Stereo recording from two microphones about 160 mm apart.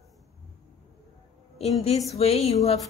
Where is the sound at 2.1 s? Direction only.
40° left (ahead or behind).